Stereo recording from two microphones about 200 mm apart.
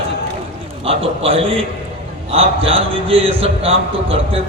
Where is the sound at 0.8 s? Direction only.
30° right (ahead or behind).